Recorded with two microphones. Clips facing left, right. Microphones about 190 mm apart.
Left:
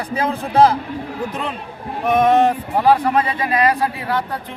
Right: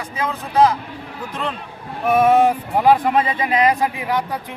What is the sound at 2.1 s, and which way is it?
A man's voice, 10° right (ahead or behind).